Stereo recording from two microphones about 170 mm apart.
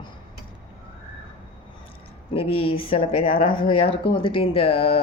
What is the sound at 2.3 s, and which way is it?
Speech, 35° left (ahead or behind).